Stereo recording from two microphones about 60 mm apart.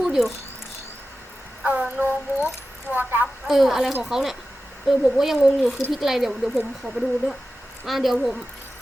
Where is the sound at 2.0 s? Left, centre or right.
Right.